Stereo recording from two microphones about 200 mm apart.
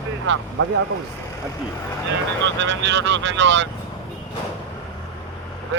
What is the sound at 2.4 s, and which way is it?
Speech, 65° right (ahead or behind).